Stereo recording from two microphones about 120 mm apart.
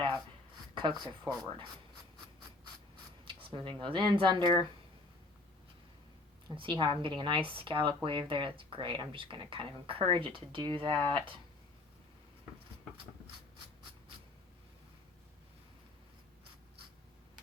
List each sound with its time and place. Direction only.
0.7 s a sound: 40° right (ahead or behind)
1.2 s speech: 5° right (ahead or behind)
3.2 s speech: 45° right (ahead or behind)
6.6 s speech: 45° right (ahead or behind)